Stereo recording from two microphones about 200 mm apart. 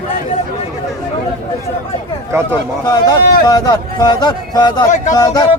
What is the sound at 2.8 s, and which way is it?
Speech, 20° left (ahead or behind).